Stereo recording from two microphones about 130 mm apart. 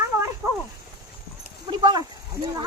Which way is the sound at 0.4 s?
10° right (ahead or behind).